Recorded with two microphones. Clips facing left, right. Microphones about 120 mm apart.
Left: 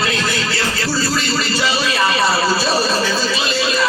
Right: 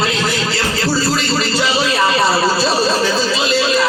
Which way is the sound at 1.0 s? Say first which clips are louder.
Right 2 dB; 25° right (ahead or behind).